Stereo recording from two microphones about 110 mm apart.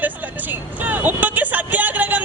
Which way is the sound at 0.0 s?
15° right (ahead or behind).